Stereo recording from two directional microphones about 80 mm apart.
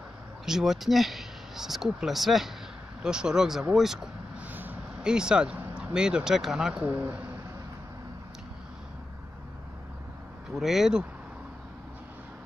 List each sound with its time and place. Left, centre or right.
0.5 s speech: centre
4.5 s a sound: right
5.0 s speech: centre
6.8 s speech: right
10.5 s speech: centre